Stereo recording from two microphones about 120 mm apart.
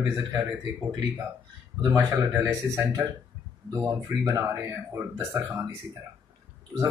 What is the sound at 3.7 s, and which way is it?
Speech, 25° right (ahead or behind).